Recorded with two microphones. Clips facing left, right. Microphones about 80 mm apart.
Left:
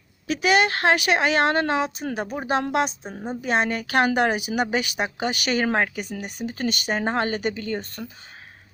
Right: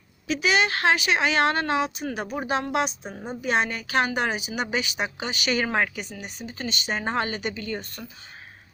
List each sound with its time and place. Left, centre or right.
0.3 s a woman's voice: left